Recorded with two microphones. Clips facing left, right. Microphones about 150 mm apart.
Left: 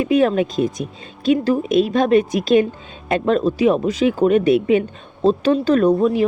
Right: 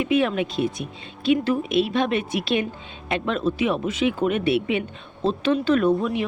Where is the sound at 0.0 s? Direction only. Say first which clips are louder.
Left 5 dB; 40° left (ahead or behind).